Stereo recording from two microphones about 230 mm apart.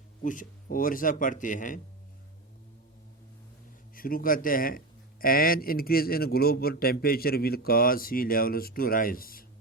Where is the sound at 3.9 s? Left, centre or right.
Left.